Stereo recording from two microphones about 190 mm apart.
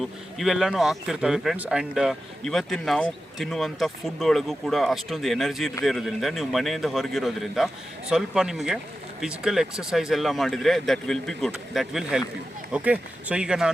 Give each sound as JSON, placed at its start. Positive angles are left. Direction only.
{"t": 0.0, "sound": "speech", "side_deg": 0}